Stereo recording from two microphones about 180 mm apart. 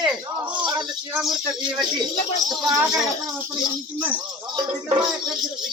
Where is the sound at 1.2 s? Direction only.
Centre (ahead or behind).